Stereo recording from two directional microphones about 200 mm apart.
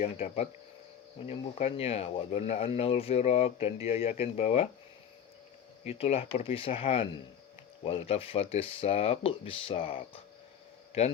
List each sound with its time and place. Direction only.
0.0 s speech: 35° left (ahead or behind)
5.8 s speech: 30° left (ahead or behind)